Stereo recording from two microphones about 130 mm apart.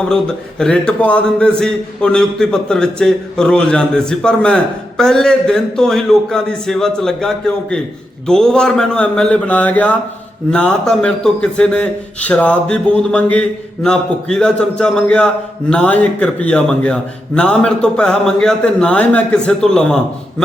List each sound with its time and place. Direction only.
0.6 s a man's voice: 10° left (ahead or behind)